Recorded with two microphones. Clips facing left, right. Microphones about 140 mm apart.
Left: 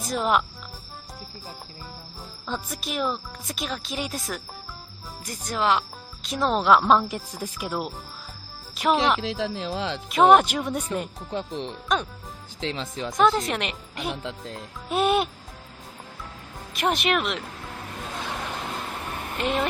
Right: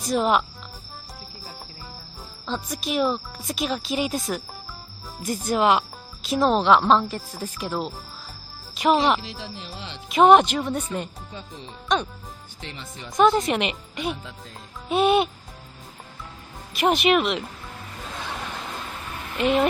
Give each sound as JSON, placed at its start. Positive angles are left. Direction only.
{"t": 0.1, "sound": "speech", "side_deg": 0}
{"t": 2.5, "sound": "speech", "side_deg": 0}
{"t": 9.2, "sound": "speech", "side_deg": 90}
{"t": 10.1, "sound": "speech", "side_deg": 0}
{"t": 11.3, "sound": "speech", "side_deg": 75}
{"t": 11.9, "sound": "speech", "side_deg": 0}
{"t": 12.5, "sound": "speech", "side_deg": 90}
{"t": 13.1, "sound": "speech", "side_deg": 0}
{"t": 14.3, "sound": "speech", "side_deg": 75}
{"t": 14.8, "sound": "speech", "side_deg": 0}
{"t": 16.7, "sound": "speech", "side_deg": 0}
{"t": 19.4, "sound": "speech", "side_deg": 0}